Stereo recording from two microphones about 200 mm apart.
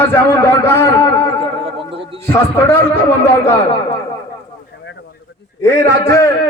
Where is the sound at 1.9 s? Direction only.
25° right (ahead or behind).